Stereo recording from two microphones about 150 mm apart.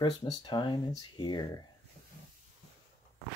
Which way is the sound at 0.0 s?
30° left (ahead or behind).